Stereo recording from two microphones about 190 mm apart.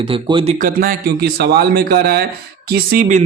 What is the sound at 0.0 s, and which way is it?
Speech, 25° right (ahead or behind).